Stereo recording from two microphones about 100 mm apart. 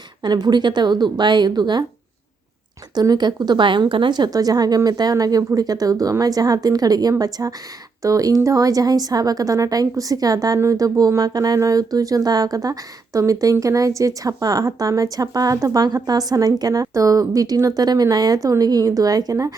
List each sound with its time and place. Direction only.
0.2 s a woman's voice: 45° right (ahead or behind)
2.9 s speech: 40° right (ahead or behind)